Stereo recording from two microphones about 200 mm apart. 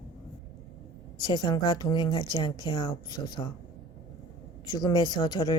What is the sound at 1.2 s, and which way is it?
A woman's voice, 20° left (ahead or behind).